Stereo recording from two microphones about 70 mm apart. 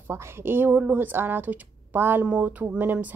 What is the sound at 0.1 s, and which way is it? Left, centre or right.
A woman's voice, right.